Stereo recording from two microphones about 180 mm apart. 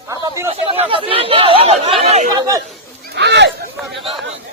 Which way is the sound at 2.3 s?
20° right (ahead or behind).